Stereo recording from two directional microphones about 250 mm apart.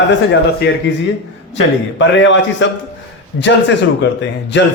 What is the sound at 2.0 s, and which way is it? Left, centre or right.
Speech, left.